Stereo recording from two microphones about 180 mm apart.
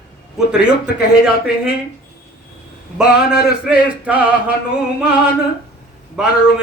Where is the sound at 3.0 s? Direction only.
5° right (ahead or behind).